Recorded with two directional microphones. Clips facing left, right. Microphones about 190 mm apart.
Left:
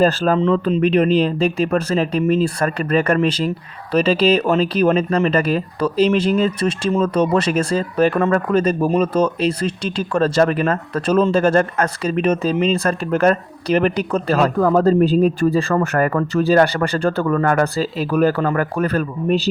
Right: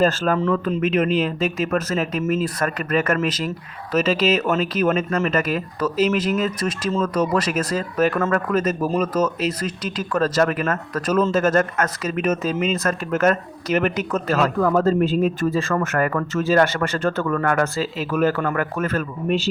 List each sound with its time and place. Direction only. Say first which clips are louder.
0.0 s speech: left 3 dB; 35° left (ahead or behind)